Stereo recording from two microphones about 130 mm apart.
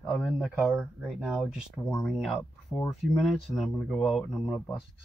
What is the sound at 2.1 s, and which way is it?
Speech, centre (ahead or behind).